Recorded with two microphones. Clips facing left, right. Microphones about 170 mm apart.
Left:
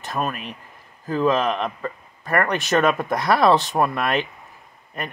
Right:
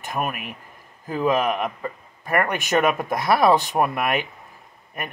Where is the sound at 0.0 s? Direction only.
15° right (ahead or behind).